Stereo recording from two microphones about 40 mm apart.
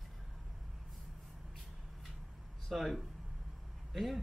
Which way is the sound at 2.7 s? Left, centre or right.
Centre.